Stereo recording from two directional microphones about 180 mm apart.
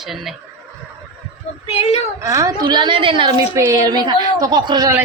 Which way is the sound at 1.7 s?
35° left (ahead or behind).